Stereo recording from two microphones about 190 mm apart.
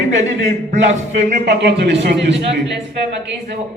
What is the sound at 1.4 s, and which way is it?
Speech, 60° right (ahead or behind).